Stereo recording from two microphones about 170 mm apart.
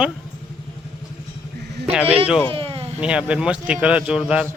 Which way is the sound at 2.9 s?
5° right (ahead or behind).